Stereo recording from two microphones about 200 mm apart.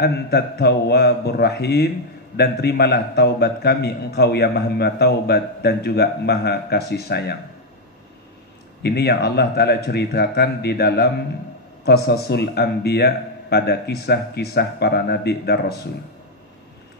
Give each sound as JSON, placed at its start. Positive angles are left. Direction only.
{"t": 0.0, "sound": "a man's voice", "side_deg": 55}
{"t": 8.8, "sound": "a man's voice", "side_deg": 55}